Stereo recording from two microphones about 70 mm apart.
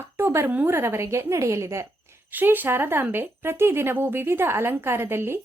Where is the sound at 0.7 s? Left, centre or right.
Right.